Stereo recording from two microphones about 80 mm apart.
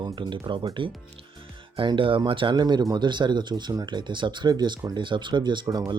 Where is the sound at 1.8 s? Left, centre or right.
Right.